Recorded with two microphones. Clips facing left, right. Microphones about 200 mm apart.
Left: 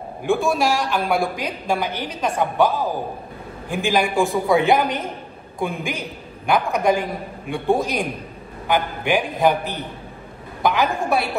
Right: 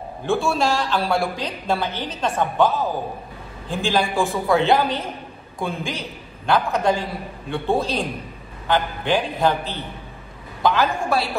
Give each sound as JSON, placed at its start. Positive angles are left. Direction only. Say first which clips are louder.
{"t": 0.2, "sound": "a woman's voice", "louder": "left 1 dB", "side_deg": 15}